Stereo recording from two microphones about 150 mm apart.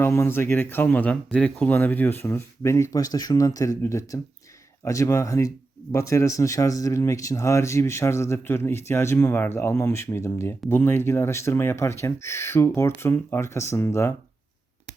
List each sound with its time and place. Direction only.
0.0 s speech: 15° left (ahead or behind)